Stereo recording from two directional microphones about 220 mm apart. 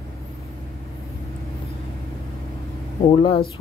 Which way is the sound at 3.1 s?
25° left (ahead or behind).